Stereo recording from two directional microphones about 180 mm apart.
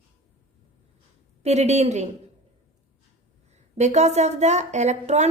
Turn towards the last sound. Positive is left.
turn(degrees=-40)  # may be behind; listen again after turning